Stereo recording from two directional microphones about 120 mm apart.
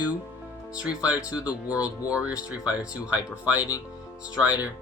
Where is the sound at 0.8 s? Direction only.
10° right (ahead or behind).